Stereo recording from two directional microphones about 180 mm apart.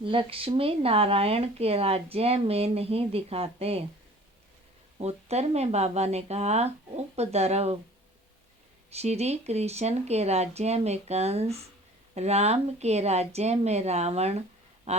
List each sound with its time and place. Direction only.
0.0 s speech: 30° right (ahead or behind)
4.9 s speech: 35° right (ahead or behind)
8.9 s speech: 35° right (ahead or behind)
14.9 s a sound: 35° right (ahead or behind)